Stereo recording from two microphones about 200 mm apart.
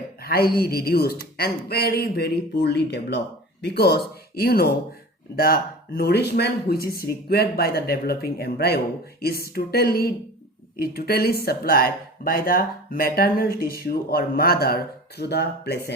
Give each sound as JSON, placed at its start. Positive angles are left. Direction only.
{"t": 0.2, "sound": "speech", "side_deg": 50}